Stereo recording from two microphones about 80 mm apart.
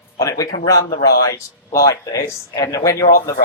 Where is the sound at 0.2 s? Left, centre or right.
Left.